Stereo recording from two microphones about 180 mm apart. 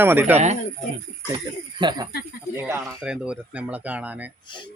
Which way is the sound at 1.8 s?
25° right (ahead or behind).